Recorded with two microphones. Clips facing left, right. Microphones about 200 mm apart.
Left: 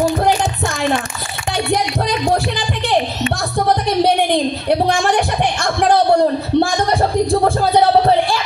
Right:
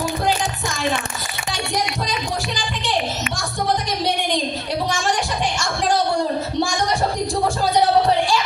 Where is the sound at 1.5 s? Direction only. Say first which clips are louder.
Left 7 dB; 60° left (ahead or behind).